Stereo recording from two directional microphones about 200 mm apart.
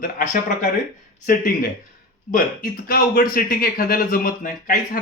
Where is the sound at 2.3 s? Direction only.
45° left (ahead or behind).